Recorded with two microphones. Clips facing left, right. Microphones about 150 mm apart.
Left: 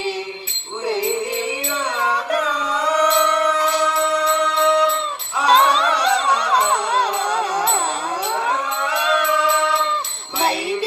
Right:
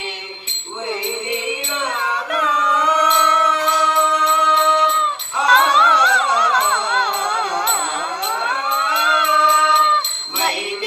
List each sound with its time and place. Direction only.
2.3 s music: 35° left (ahead or behind)